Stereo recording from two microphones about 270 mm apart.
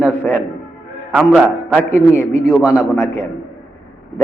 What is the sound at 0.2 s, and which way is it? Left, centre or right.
Music, centre.